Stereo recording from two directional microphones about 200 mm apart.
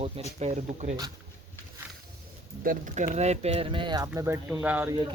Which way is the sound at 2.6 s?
40° right (ahead or behind).